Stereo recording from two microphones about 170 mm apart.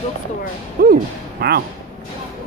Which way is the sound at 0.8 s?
60° right (ahead or behind).